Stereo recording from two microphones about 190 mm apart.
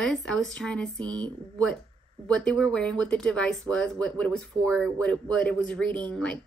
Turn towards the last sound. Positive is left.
turn(degrees=5)  # may be behind; listen again after turning